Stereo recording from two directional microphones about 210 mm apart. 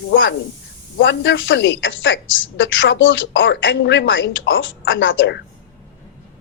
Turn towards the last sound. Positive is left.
turn(degrees=60)  # may be behind; listen again after turning